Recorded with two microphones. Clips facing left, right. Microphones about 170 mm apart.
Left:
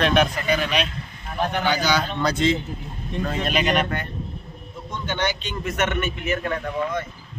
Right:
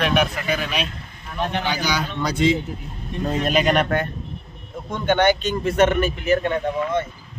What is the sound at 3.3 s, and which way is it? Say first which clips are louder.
Speech: right 4 dB; 40° right (ahead or behind).